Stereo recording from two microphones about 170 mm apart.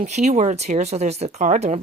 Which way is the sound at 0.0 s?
40° right (ahead or behind).